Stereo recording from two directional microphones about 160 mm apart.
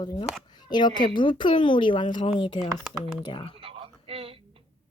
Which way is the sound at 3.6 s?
35° right (ahead or behind).